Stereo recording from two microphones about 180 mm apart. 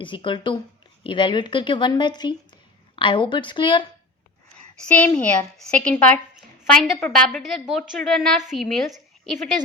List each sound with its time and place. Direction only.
0.0 s speech: 25° left (ahead or behind)
4.5 s a woman's voice: 10° left (ahead or behind)